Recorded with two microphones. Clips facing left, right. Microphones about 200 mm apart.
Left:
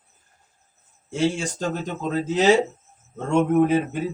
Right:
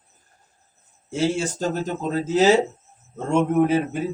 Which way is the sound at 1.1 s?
5° right (ahead or behind).